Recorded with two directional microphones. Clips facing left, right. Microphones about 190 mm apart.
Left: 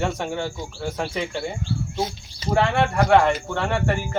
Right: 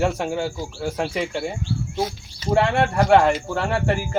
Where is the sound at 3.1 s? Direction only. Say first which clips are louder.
Right 2 dB; 5° right (ahead or behind).